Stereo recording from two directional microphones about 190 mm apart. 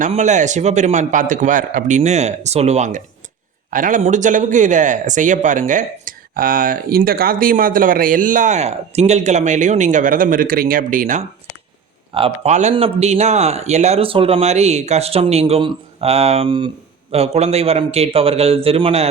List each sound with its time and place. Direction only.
0.0 s speech: 40° right (ahead or behind)
12.1 s speech: 30° right (ahead or behind)